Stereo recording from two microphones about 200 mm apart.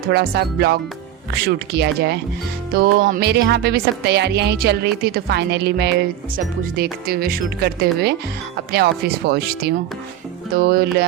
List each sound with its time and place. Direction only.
0.1 s a woman's voice: 55° right (ahead or behind)